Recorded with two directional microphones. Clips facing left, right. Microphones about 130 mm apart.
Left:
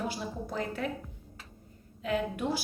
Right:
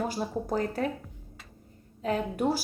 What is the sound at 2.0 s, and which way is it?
Speech, 40° right (ahead or behind).